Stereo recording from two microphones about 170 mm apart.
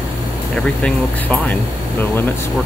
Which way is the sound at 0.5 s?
5° left (ahead or behind).